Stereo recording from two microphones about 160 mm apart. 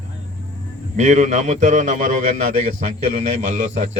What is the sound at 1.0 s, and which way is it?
Speech, 45° right (ahead or behind).